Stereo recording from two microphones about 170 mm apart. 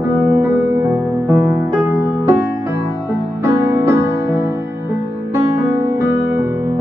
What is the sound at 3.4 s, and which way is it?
Music, 15° right (ahead or behind).